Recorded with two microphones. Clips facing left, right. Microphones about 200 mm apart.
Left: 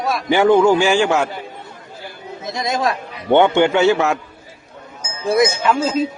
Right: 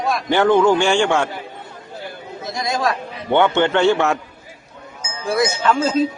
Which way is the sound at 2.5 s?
20° left (ahead or behind).